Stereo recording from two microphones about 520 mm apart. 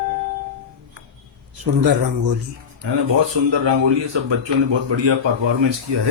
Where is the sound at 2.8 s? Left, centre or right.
Right.